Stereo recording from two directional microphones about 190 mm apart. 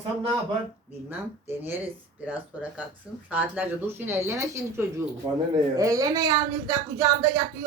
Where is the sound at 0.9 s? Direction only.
10° right (ahead or behind).